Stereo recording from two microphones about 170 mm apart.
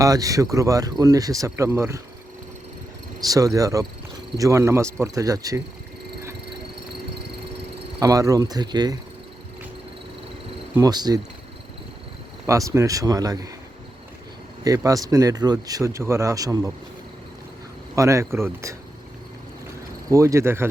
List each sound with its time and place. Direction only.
0.0 s speech: 20° right (ahead or behind)
3.2 s speech: 20° right (ahead or behind)
7.9 s speech: 20° right (ahead or behind)
10.8 s speech: 25° right (ahead or behind)
12.5 s speech: 20° right (ahead or behind)
14.6 s speech: 20° right (ahead or behind)
17.9 s speech: 20° right (ahead or behind)
20.1 s speech: 15° right (ahead or behind)